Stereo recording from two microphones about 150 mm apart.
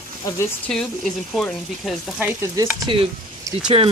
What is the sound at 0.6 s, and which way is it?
Speech, 5° left (ahead or behind).